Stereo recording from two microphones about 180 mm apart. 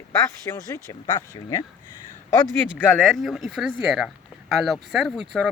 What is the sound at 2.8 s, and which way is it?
Speech, 5° left (ahead or behind).